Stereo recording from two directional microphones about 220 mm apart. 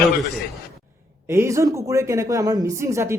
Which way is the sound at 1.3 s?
15° right (ahead or behind).